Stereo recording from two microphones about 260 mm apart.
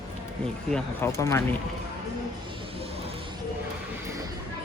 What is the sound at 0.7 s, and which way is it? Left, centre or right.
Speech, centre.